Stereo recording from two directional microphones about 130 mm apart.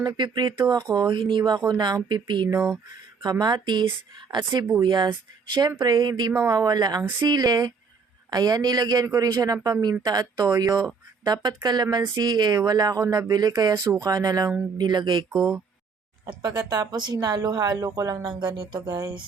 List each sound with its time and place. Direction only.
0.0 s speech: 30° right (ahead or behind)
15.3 s speech: 5° right (ahead or behind)
16.2 s speech: 30° right (ahead or behind)